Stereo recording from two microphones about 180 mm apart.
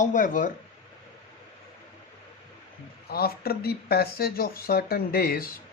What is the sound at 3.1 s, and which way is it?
Speech, 60° left (ahead or behind).